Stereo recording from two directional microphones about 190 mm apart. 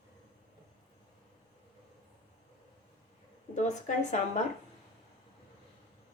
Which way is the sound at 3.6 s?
40° left (ahead or behind).